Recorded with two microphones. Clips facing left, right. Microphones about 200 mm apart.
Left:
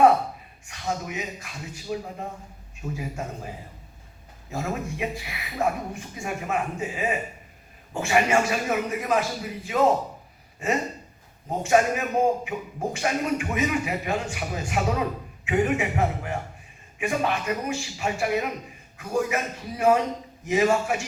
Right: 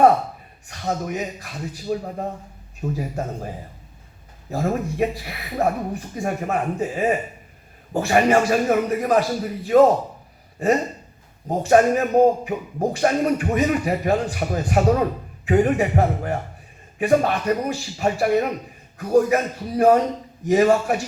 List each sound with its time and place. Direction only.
0.7 s speech: 40° right (ahead or behind)
4.5 s speech: 40° right (ahead or behind)
11.4 s speech: 35° right (ahead or behind)